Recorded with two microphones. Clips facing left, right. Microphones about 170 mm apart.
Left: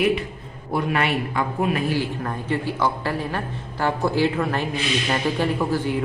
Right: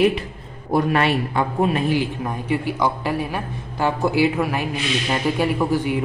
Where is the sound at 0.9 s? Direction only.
30° right (ahead or behind).